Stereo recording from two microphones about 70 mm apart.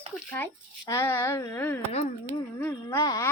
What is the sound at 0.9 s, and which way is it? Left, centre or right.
Speech, left.